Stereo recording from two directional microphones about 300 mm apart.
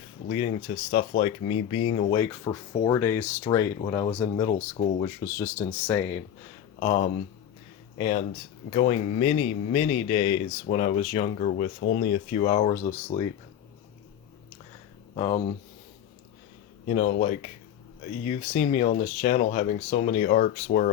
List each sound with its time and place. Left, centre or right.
0.3 s speech: centre
5.0 s speech: centre
6.7 s speech: centre
15.1 s speech: left
16.9 s speech: left